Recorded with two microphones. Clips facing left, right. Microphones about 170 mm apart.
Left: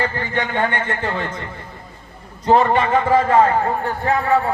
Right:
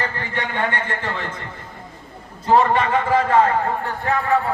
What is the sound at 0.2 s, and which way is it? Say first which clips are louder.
A man's voice: left 4 dB; 30° left (ahead or behind).